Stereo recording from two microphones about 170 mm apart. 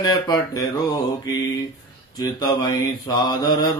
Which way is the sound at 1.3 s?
20° left (ahead or behind).